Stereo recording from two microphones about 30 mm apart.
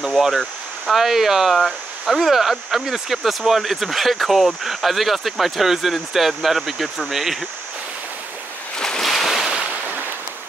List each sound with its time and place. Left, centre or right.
0.2 s speech: centre
8.7 s waves: left
9.0 s boat: centre
9.7 s a sound: right